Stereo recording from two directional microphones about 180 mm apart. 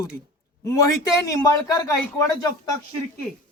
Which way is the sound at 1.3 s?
20° left (ahead or behind).